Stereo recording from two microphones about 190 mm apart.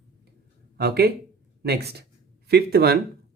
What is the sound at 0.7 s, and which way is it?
Speech, 55° right (ahead or behind).